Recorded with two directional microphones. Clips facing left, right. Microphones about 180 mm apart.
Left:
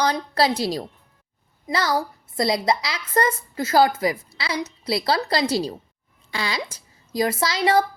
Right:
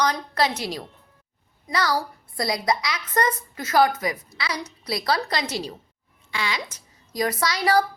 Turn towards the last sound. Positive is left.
turn(degrees=25)  # may be behind; listen again after turning